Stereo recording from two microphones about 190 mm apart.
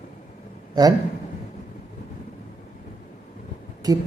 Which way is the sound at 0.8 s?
20° right (ahead or behind).